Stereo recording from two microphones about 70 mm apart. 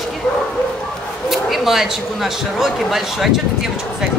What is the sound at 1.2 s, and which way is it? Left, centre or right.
Speech, centre.